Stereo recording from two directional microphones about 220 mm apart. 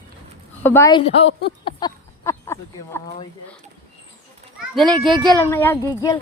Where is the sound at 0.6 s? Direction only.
10° left (ahead or behind); by 1.3 s 25° left (ahead or behind).